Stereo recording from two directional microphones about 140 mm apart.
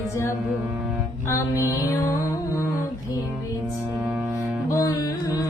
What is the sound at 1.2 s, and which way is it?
Music, 20° left (ahead or behind).